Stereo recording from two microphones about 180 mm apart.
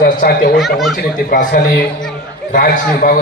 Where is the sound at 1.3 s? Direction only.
50° left (ahead or behind).